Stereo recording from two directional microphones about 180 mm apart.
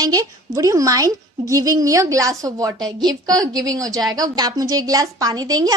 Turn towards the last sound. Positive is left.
turn(degrees=-20)  # may be behind; listen again after turning